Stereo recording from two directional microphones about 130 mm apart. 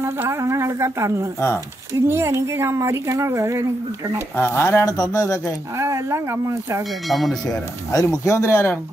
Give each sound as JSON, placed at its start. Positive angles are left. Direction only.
{"t": 0.0, "sound": "speech", "side_deg": -20}
{"t": 4.4, "sound": "speech", "side_deg": 20}
{"t": 5.8, "sound": "speech", "side_deg": -20}
{"t": 7.1, "sound": "speech", "side_deg": 0}
{"t": 7.4, "sound": "speech", "side_deg": 30}